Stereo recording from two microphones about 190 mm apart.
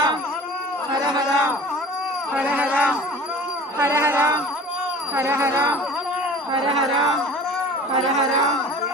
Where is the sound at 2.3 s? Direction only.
5° right (ahead or behind).